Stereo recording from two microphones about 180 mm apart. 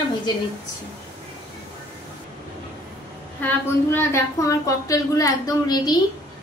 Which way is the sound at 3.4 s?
10° left (ahead or behind).